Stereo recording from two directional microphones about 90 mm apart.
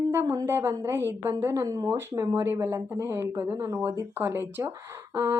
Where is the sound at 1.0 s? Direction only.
25° right (ahead or behind).